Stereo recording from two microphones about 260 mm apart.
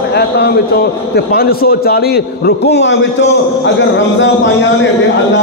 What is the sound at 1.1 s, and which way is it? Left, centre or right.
A man's voice, left.